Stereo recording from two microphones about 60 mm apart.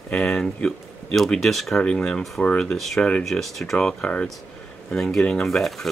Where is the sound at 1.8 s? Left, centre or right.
Centre.